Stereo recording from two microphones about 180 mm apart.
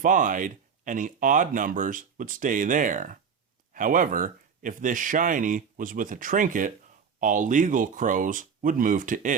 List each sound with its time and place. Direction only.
0.0 s speech: 45° right (ahead or behind)